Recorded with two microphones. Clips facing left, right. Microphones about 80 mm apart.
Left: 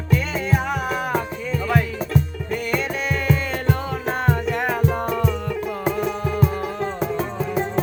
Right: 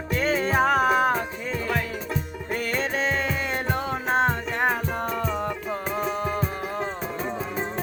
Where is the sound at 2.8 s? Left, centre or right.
Right.